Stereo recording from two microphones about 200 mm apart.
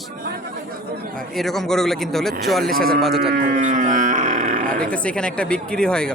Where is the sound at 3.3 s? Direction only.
45° right (ahead or behind).